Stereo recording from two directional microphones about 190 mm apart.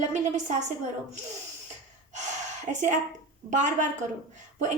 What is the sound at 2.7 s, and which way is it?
A woman's voice, 40° right (ahead or behind).